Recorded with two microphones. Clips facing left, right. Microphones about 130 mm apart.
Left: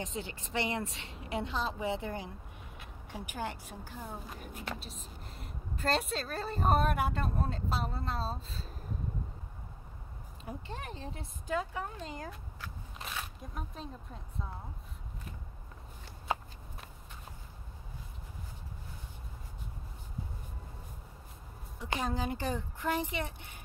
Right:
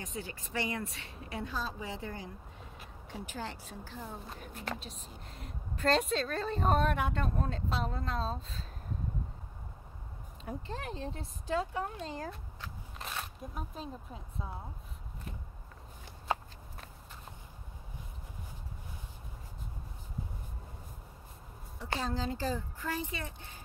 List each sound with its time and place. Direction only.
0.0 s a woman's voice: 25° left (ahead or behind)
4.7 s a woman's voice: centre (ahead or behind)
10.4 s a woman's voice: centre (ahead or behind)
11.1 s speech: 30° right (ahead or behind)
12.5 s biting: centre (ahead or behind)
21.8 s a woman's voice: 15° left (ahead or behind)